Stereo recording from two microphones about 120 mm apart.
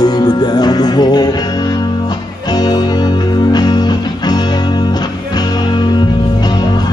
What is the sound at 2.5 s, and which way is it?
Music, 35° left (ahead or behind).